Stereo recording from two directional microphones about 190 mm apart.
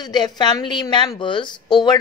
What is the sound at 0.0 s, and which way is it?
A woman's voice, 25° left (ahead or behind).